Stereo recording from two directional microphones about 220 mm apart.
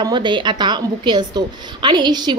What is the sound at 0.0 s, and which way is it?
A woman's voice, 20° right (ahead or behind).